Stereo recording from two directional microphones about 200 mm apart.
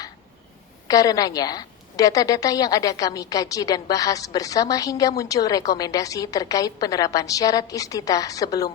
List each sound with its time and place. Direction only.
0.9 s a woman's voice: 20° left (ahead or behind)